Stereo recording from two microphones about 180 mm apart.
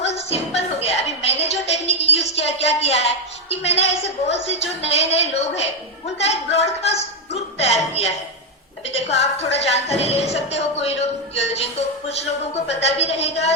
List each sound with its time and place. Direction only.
0.0 s music: 35° left (ahead or behind)
0.8 s a sound: 35° left (ahead or behind)
3.5 s music: 35° left (ahead or behind)
4.0 s speech: 35° left (ahead or behind)